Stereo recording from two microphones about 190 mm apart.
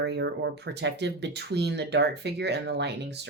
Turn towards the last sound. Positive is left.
turn(degrees=-65)  # may be behind; listen again after turning